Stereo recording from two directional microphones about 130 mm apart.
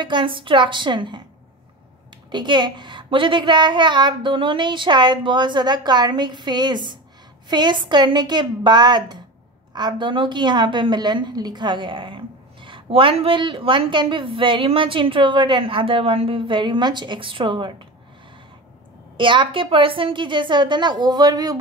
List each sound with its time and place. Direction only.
0.0 s a woman's voice: 40° right (ahead or behind)
2.3 s a woman's voice: 35° right (ahead or behind)
19.1 s a woman's voice: 40° right (ahead or behind)